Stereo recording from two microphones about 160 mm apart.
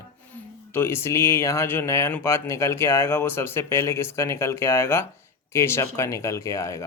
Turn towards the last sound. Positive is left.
turn(degrees=20)  # may be behind; listen again after turning